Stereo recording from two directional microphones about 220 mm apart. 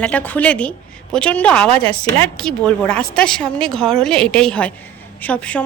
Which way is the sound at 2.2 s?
5° left (ahead or behind).